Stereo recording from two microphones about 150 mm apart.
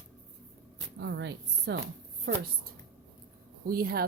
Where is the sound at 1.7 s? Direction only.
90° right.